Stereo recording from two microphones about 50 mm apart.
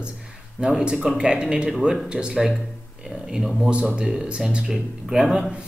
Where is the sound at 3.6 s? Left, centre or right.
Right.